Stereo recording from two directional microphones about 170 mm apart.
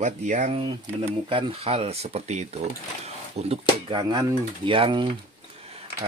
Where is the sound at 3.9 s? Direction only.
25° right (ahead or behind).